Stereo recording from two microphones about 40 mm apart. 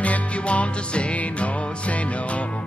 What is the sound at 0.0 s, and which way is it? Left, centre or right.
Music, left.